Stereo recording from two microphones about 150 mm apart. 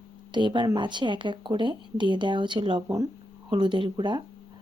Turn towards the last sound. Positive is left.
turn(degrees=-30)  # may be behind; listen again after turning